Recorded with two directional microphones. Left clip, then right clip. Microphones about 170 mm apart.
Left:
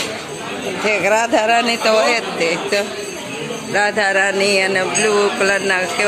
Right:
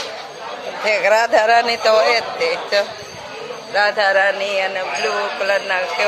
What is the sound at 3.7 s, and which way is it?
Speech, centre (ahead or behind).